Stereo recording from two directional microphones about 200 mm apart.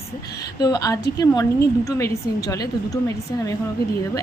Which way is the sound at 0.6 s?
20° left (ahead or behind).